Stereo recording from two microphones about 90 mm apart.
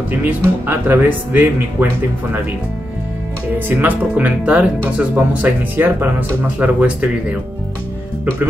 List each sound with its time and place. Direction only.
0.1 s speech: 20° right (ahead or behind)
3.5 s speech: 20° right (ahead or behind)